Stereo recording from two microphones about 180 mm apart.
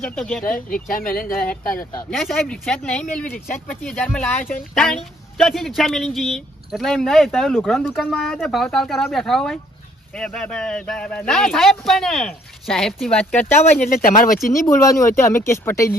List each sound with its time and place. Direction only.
0.0 s speech: 5° left (ahead or behind)
0.7 s speech: 50° left (ahead or behind)
2.0 s speech: 5° left (ahead or behind)
14.0 s speech: 50° left (ahead or behind)
14.7 s speech: 15° left (ahead or behind)